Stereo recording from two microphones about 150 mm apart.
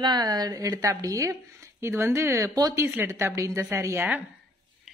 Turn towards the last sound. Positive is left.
turn(degrees=-15)  # may be behind; listen again after turning